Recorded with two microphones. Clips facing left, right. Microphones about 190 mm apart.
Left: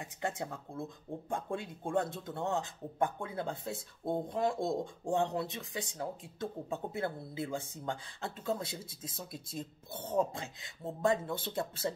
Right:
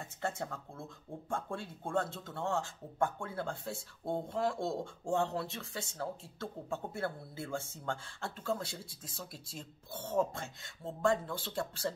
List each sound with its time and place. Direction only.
0.0 s speech: 15° left (ahead or behind)